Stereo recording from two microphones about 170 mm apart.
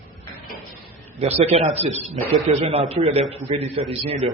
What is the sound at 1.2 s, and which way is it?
A man's voice, 40° right (ahead or behind).